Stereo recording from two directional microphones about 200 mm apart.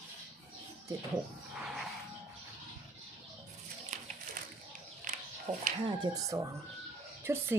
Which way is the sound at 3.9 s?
40° right (ahead or behind).